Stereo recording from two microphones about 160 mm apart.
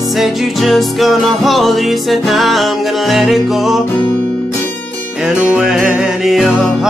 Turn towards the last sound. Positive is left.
turn(degrees=0)  # may be behind; listen again after turning